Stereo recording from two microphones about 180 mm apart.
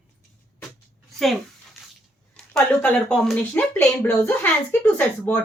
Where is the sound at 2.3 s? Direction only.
5° left (ahead or behind).